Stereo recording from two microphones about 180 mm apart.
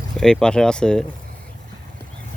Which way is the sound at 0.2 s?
5° left (ahead or behind).